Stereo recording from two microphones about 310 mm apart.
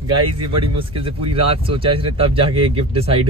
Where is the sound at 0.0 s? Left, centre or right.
Centre.